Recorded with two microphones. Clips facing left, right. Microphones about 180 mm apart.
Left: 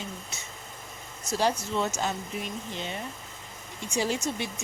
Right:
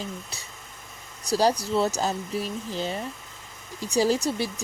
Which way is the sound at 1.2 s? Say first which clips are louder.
Right 5 dB; 35° right (ahead or behind).